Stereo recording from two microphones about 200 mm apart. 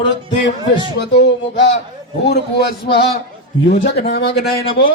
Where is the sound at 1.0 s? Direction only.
60° left (ahead or behind).